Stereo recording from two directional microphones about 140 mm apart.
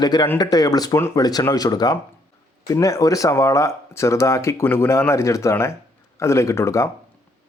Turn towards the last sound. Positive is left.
turn(degrees=20)  # may be behind; listen again after turning